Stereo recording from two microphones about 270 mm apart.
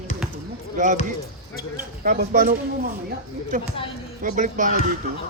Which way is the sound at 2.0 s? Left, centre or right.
Right.